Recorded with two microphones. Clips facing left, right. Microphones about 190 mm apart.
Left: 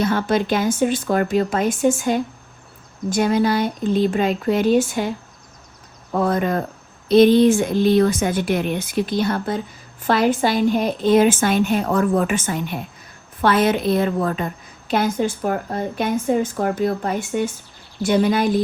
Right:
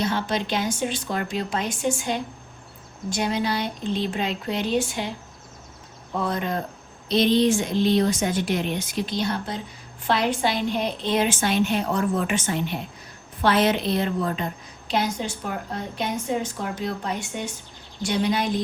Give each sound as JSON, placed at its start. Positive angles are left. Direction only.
{"t": 0.0, "sound": "a woman's voice", "side_deg": 50}
{"t": 6.1, "sound": "a woman's voice", "side_deg": 50}